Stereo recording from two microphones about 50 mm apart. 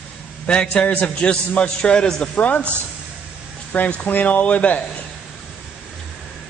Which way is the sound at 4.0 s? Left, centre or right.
Left.